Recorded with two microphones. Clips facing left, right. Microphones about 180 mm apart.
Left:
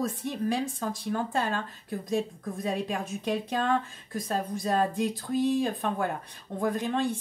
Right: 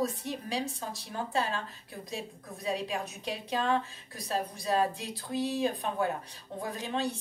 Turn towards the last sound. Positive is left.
turn(degrees=50)  # may be behind; listen again after turning